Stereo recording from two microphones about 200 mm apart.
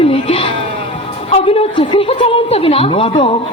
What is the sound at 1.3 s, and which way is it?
A woman's voice, 30° left (ahead or behind).